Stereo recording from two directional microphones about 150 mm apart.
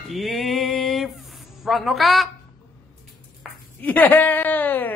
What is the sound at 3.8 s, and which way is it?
Speech, 10° left (ahead or behind).